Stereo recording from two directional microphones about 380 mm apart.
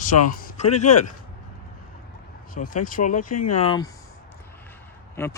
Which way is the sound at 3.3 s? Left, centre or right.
Left.